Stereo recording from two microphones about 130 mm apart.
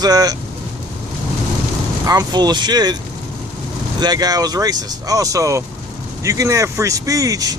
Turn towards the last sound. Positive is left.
turn(degrees=-25)  # may be behind; listen again after turning